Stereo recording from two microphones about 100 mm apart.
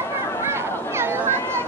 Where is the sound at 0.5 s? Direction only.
25° right (ahead or behind).